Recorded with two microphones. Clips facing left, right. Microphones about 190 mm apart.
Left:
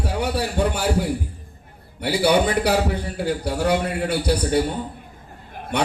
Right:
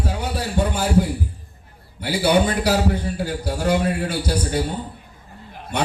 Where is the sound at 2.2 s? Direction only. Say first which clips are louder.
Even; 60° left (ahead or behind).